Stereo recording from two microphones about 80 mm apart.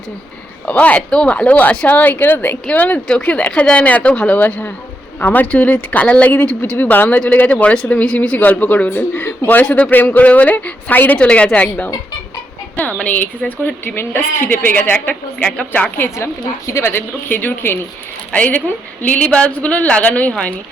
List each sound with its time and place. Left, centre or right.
0.6 s speech: centre
13.0 s speech: centre
13.9 s speech: left
16.1 s a woman's voice: left
16.9 s speech: left